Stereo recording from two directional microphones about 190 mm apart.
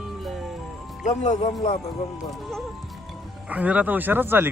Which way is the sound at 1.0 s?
35° left (ahead or behind).